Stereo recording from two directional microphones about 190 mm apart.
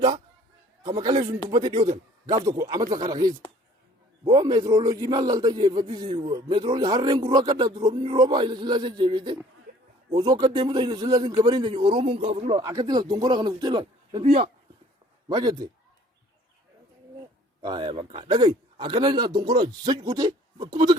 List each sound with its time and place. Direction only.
0.8 s a man's voice: 20° right (ahead or behind)
14.3 s speech: 35° right (ahead or behind)
15.3 s a man's voice: 20° right (ahead or behind)
17.6 s a man's voice: 25° right (ahead or behind)